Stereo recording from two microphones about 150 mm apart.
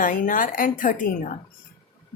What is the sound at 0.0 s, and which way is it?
A woman's voice, 65° left (ahead or behind).